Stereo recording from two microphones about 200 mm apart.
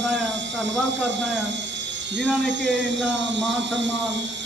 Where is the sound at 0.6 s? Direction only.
65° right (ahead or behind).